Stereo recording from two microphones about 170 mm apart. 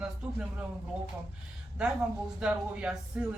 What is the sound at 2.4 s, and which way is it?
Speech, 5° right (ahead or behind).